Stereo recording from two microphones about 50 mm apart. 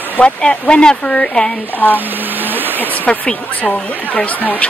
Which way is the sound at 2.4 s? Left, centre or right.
Right.